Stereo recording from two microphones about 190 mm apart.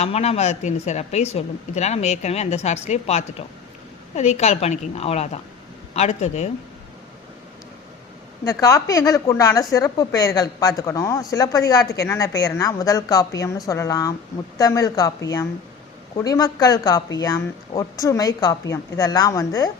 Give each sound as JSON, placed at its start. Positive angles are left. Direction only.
{"t": 0.0, "sound": "speech", "side_deg": 35}
{"t": 8.4, "sound": "a woman's voice", "side_deg": 20}